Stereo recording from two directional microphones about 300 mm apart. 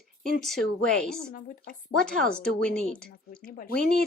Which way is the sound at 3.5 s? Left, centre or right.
Left.